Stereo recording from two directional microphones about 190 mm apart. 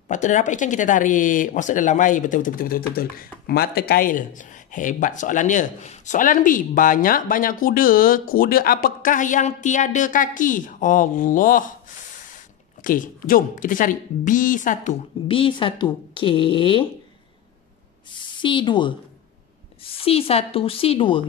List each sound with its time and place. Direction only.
0.1 s speech: 40° left (ahead or behind)
12.8 s speech: 45° left (ahead or behind)
15.2 s speech: 30° left (ahead or behind)
18.1 s speech: 25° left (ahead or behind)